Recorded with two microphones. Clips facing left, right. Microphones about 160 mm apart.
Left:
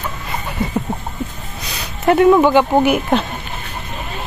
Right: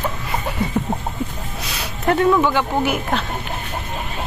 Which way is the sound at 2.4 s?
15° left (ahead or behind).